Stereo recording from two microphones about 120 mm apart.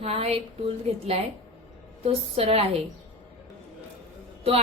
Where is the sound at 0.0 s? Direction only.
55° right (ahead or behind).